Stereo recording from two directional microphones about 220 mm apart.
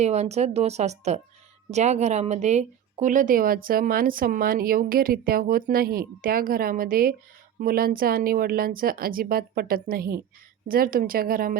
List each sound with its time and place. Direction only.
0.0 s a woman's voice: 30° right (ahead or behind)